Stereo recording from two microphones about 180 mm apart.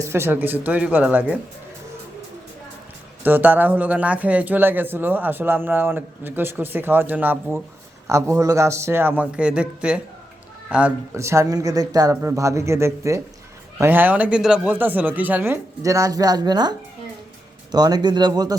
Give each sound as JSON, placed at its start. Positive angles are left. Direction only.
{"t": 0.0, "sound": "speech", "side_deg": -15}
{"t": 3.2, "sound": "speech", "side_deg": -10}